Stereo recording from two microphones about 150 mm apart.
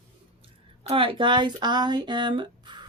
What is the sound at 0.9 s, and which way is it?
Speech, 35° right (ahead or behind).